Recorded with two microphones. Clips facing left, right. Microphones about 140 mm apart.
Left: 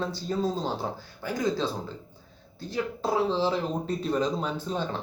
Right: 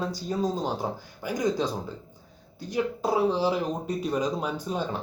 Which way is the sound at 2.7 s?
15° right (ahead or behind).